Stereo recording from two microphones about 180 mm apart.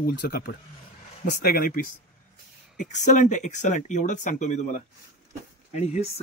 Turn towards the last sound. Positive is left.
turn(degrees=40)  # may be behind; listen again after turning